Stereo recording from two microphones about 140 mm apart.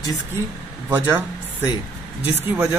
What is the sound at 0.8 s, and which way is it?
Speech, 10° right (ahead or behind).